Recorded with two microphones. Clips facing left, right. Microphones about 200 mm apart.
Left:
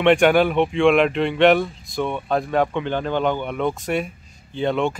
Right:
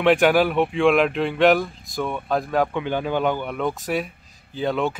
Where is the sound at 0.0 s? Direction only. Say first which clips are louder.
Left 2 dB; centre (ahead or behind).